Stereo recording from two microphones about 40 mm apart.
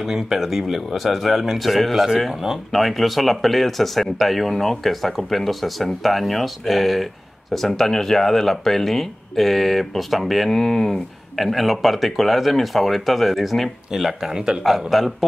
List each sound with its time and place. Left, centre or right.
0.0 s speech: centre
11.3 s speech: centre
14.3 s speech: centre
14.9 s speech: centre